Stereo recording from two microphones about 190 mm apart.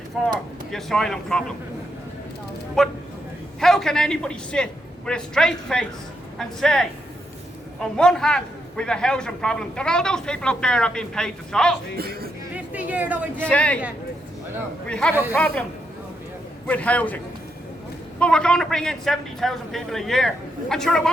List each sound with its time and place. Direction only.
0.1 s a man's voice: centre (ahead or behind)
2.8 s a man's voice: centre (ahead or behind)
11.9 s speech: 55° right (ahead or behind)
12.5 s chatter: 10° right (ahead or behind)
13.4 s a man's voice: 5° left (ahead or behind)
14.8 s a man's voice: 5° left (ahead or behind)
15.1 s speech: 10° right (ahead or behind)
15.4 s a man's voice: 5° left (ahead or behind)
16.6 s a man's voice: 5° left (ahead or behind)
18.2 s a man's voice: 5° left (ahead or behind)